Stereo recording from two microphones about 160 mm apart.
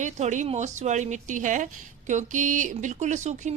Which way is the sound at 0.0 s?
50° right (ahead or behind).